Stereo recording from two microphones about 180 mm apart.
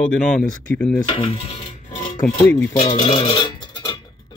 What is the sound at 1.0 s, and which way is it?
Dishes, 30° left (ahead or behind).